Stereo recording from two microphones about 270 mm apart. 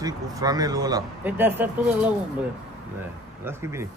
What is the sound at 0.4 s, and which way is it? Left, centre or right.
A man's voice, centre.